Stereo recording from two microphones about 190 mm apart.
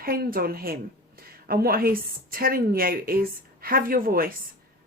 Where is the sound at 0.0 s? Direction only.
50° right (ahead or behind).